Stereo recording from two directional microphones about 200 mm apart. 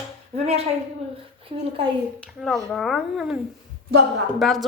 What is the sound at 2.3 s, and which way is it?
Speech, centre (ahead or behind).